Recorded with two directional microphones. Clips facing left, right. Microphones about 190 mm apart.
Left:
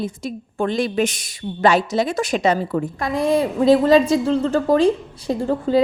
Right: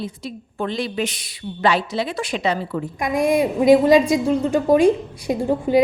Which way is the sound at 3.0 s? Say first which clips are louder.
Right 2 dB; 15° right (ahead or behind).